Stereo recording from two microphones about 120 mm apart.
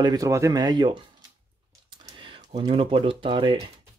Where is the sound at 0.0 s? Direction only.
30° right (ahead or behind).